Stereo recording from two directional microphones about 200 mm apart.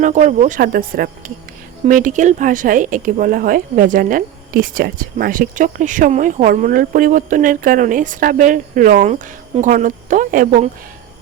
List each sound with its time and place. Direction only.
0.0 s speech: 40° right (ahead or behind)